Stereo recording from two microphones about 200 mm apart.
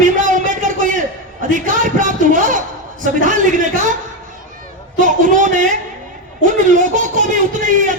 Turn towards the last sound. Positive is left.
turn(degrees=-40)  # may be behind; listen again after turning